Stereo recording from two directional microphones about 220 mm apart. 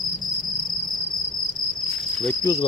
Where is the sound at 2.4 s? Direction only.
15° left (ahead or behind).